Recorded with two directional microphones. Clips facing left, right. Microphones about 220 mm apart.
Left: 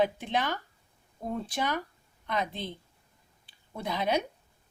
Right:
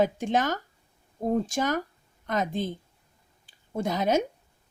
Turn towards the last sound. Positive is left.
turn(degrees=-45)  # may be behind; listen again after turning